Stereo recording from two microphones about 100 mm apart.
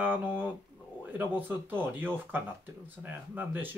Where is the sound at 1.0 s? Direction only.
20° right (ahead or behind).